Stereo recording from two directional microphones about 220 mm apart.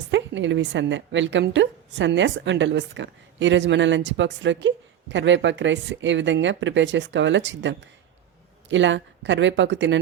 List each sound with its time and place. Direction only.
0.1 s a woman's voice: 55° right (ahead or behind)